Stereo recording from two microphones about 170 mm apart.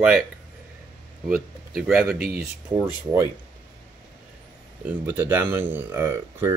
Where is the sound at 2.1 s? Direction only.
65° right (ahead or behind).